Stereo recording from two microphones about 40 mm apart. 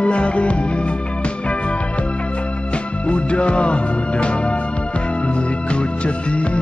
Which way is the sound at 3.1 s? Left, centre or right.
Left.